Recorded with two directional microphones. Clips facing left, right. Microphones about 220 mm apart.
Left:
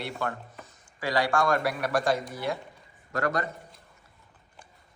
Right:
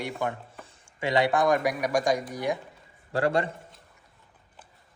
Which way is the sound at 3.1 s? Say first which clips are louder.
Right 4 dB; 30° right (ahead or behind).